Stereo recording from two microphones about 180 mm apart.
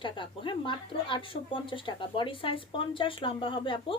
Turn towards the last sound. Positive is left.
turn(degrees=30)  # may be behind; listen again after turning